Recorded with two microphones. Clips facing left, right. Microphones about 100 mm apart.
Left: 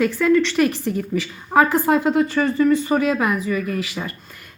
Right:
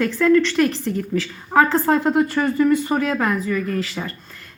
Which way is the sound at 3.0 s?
10° left (ahead or behind).